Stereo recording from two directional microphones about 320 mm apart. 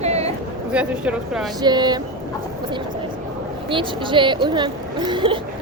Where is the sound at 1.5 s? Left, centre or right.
Centre.